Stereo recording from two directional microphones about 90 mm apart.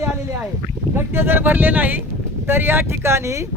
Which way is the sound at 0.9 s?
25° right (ahead or behind).